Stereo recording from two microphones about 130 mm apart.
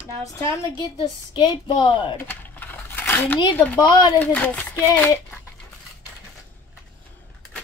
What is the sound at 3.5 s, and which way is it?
Speech, 15° left (ahead or behind).